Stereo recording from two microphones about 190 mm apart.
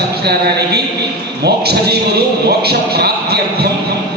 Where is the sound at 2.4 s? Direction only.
55° right (ahead or behind).